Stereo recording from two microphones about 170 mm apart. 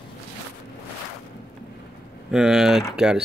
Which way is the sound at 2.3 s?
Centre (ahead or behind).